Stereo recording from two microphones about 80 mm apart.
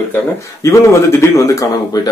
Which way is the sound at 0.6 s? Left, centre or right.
Left.